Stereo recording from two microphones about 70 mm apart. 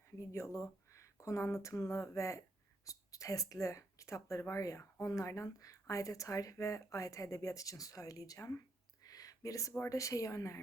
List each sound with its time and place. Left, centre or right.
0.2 s speech: left
9.0 s a sound: left
9.9 s speech: left